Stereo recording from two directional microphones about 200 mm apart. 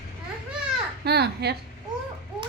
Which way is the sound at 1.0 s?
55° right (ahead or behind).